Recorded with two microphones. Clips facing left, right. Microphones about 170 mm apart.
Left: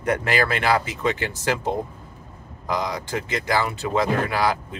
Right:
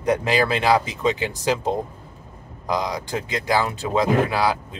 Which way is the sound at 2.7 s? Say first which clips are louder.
Right 1 dB; 15° right (ahead or behind).